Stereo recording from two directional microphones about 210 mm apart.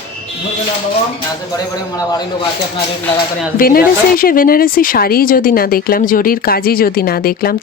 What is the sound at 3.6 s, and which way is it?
Speech, 45° left (ahead or behind).